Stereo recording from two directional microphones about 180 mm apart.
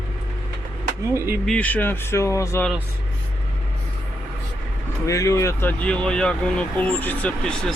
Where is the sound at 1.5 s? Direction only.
10° left (ahead or behind).